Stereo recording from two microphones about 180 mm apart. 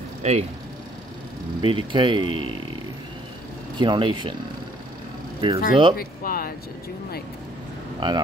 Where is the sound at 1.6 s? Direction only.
30° right (ahead or behind).